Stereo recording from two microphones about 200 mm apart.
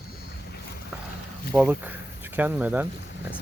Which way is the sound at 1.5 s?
5° right (ahead or behind).